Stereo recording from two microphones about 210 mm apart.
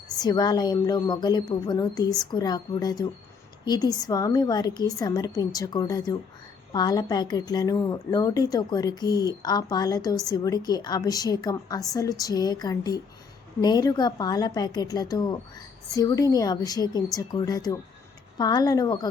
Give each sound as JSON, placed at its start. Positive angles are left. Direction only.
{"t": 0.2, "sound": "a woman's voice", "side_deg": 20}